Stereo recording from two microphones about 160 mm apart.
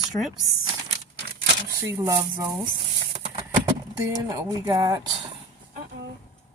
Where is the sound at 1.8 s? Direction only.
20° right (ahead or behind).